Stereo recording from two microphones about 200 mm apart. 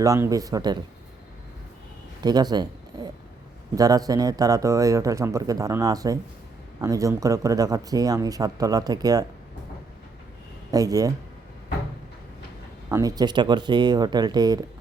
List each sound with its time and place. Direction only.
0.0 s speech: 15° right (ahead or behind)
2.2 s speech: 20° right (ahead or behind)
10.7 s speech: 20° right (ahead or behind)
12.9 s speech: 20° right (ahead or behind)